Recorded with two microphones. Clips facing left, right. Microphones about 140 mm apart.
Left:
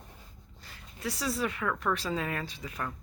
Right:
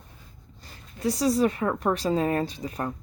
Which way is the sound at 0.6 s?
40° right (ahead or behind).